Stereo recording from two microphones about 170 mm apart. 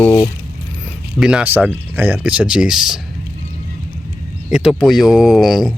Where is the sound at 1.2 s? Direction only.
5° right (ahead or behind).